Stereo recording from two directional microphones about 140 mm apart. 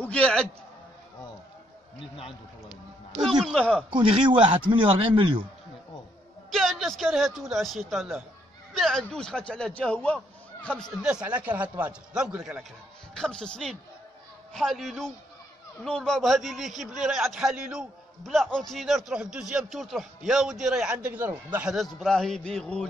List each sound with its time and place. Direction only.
0.0 s a man's voice: 5° left (ahead or behind)
3.2 s a man's voice: 5° right (ahead or behind)
3.9 s speech: 35° right (ahead or behind)
6.5 s a man's voice: centre (ahead or behind)
11.2 s a man's voice: 10° right (ahead or behind)
13.1 s a man's voice: 5° left (ahead or behind); by 21.7 s 10° right (ahead or behind)
22.0 s a man's voice: centre (ahead or behind)